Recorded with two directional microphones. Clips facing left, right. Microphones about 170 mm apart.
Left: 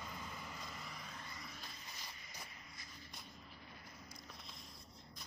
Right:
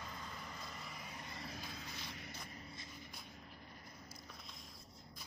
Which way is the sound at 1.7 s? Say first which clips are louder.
Right 6 dB; 65° right (ahead or behind).